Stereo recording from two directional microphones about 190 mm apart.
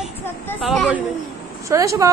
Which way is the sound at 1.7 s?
15° right (ahead or behind).